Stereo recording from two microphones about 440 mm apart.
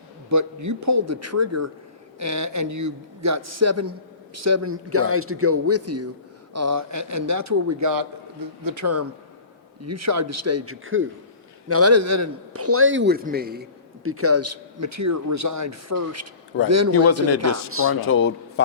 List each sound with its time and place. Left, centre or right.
0.3 s a man's voice: right
18.0 s speech: left